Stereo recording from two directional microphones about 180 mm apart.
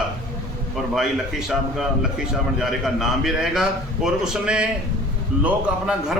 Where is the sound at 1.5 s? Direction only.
5° right (ahead or behind).